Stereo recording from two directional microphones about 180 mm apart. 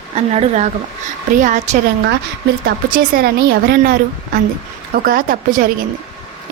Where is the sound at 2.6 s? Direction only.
55° right (ahead or behind).